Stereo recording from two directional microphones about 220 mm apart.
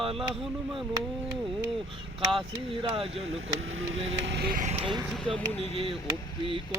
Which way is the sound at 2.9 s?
25° right (ahead or behind).